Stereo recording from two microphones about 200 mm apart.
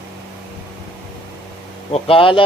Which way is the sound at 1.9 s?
25° left (ahead or behind).